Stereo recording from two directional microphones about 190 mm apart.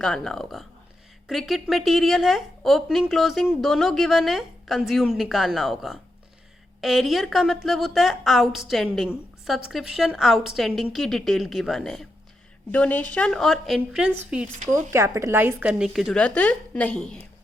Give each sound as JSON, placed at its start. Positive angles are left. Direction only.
{"t": 0.0, "sound": "a woman's voice", "side_deg": 0}
{"t": 14.9, "sound": "a woman's voice", "side_deg": -15}